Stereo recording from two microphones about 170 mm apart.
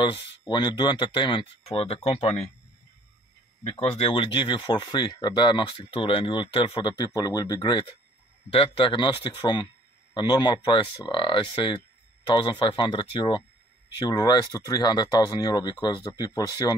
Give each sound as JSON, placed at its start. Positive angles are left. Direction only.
{"t": 0.5, "sound": "speech", "side_deg": 25}
{"t": 3.6, "sound": "speech", "side_deg": 35}